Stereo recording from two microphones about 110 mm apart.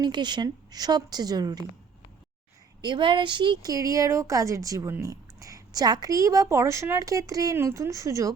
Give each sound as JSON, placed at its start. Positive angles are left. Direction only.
{"t": 0.0, "sound": "speech", "side_deg": -40}
{"t": 2.8, "sound": "speech", "side_deg": -45}
{"t": 3.7, "sound": "speech", "side_deg": -30}